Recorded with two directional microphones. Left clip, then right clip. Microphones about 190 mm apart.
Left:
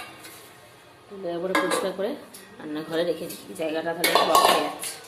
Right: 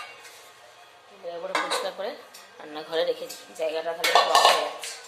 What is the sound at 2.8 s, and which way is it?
Speech, 20° right (ahead or behind).